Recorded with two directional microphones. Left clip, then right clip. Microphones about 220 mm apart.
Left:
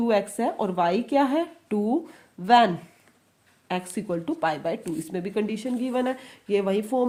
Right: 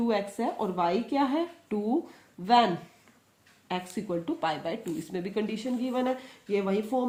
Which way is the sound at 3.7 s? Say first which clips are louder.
Left 4 dB; 40° left (ahead or behind).